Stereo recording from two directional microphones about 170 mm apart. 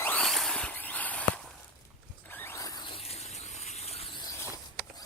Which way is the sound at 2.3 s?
15° left (ahead or behind).